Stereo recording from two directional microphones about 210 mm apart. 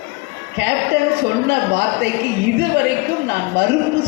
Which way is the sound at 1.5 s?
50° right (ahead or behind).